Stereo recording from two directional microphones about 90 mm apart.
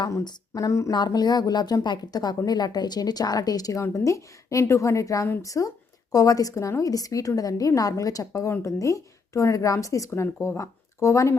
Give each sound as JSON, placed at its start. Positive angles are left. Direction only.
{"t": 0.3, "sound": "a woman's voice", "side_deg": 40}
{"t": 0.9, "sound": "a woman's voice", "side_deg": 55}